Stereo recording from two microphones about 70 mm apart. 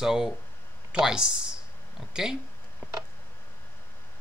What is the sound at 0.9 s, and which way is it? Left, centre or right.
Speech, centre.